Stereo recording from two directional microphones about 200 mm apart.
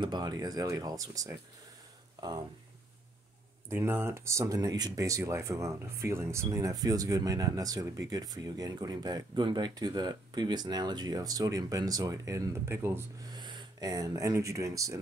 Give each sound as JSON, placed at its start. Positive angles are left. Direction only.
{"t": 0.0, "sound": "speech", "side_deg": -20}
{"t": 3.6, "sound": "speech", "side_deg": -10}